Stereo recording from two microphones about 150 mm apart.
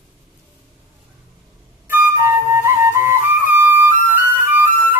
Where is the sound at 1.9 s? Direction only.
15° right (ahead or behind).